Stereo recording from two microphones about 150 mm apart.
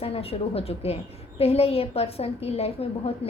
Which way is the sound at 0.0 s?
40° left (ahead or behind).